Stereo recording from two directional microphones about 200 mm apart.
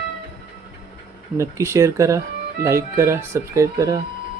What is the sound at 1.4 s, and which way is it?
A man's voice, 15° right (ahead or behind).